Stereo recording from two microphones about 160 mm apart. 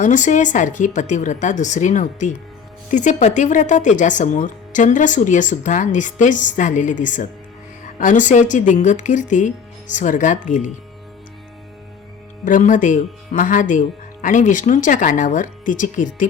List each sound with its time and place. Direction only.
0.0 s speech: 50° left (ahead or behind)
12.5 s speech: 55° left (ahead or behind)